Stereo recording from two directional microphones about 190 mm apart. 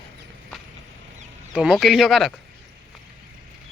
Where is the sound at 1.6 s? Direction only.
Centre (ahead or behind).